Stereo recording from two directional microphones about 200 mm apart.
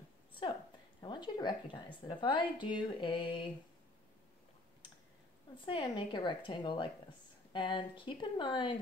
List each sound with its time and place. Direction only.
1.0 s a sound: 20° left (ahead or behind)
2.0 s a woman's voice: 25° left (ahead or behind)
5.7 s a woman's voice: 25° left (ahead or behind)